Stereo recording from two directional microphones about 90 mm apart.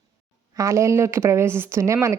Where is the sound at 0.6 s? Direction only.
35° right (ahead or behind).